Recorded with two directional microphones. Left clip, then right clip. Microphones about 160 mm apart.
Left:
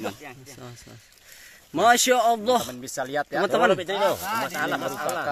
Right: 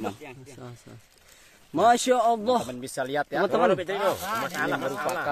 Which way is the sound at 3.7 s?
65° left (ahead or behind).